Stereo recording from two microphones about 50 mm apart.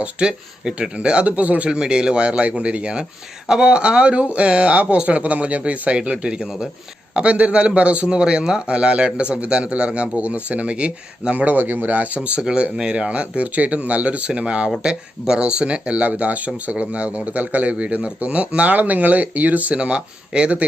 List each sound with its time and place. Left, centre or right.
0.0 s a man's voice: centre
1.7 s a man's voice: centre
6.0 s a man's voice: centre
11.5 s speech: right
12.4 s a man's voice: centre